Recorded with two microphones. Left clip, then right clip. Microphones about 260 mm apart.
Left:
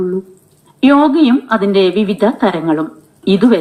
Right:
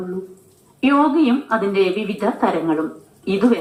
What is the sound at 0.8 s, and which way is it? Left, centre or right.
Speech, left.